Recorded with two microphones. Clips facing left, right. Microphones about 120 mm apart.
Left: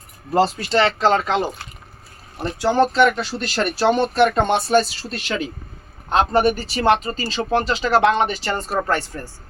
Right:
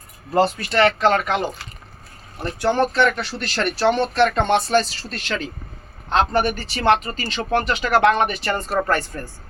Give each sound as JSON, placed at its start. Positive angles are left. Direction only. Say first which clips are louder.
{"t": 0.3, "sound": "speech", "louder": "even", "side_deg": 25}
{"t": 3.0, "sound": "speech", "louder": "left 3 dB", "side_deg": 15}
{"t": 6.9, "sound": "speech", "louder": "left 1 dB", "side_deg": 25}